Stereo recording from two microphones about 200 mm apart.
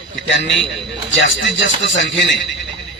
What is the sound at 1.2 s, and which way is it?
Speech, 65° left (ahead or behind).